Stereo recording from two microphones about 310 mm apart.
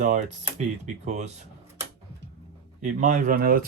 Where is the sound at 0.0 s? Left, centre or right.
Right.